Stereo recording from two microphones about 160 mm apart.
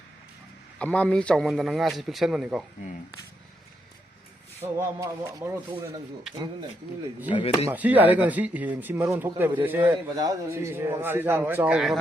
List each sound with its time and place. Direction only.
0.8 s a man's voice: 5° left (ahead or behind)
4.6 s speech: 15° right (ahead or behind)
7.3 s speech: 30° left (ahead or behind)
7.7 s speech: 10° right (ahead or behind)
9.9 s speech: 20° right (ahead or behind); by 11.9 s 5° right (ahead or behind)